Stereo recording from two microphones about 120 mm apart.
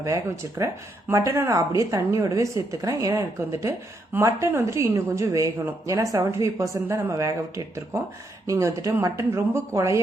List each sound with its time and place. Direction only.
0.6 s speech: 25° right (ahead or behind)